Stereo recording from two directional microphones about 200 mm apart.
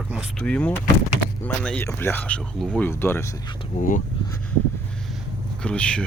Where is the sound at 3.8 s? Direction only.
40° left (ahead or behind).